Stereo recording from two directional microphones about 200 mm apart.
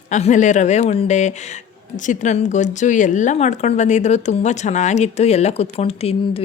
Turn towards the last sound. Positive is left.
turn(degrees=30)  # may be behind; listen again after turning